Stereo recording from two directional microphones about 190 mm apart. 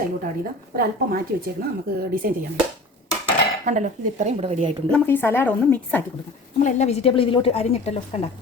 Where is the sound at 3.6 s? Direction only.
40° right (ahead or behind).